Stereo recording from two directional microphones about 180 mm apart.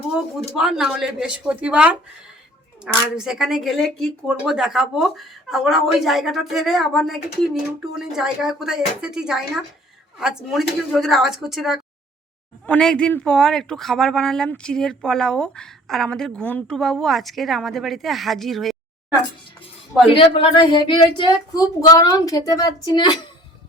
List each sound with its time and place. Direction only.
0.1 s speech: 5° right (ahead or behind)
20.1 s a woman's voice: 30° left (ahead or behind)